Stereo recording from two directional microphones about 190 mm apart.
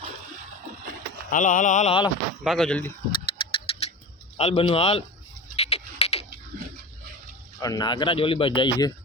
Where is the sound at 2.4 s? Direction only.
Centre (ahead or behind).